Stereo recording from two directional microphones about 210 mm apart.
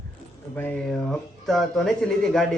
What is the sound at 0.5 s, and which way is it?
Speech, 10° left (ahead or behind).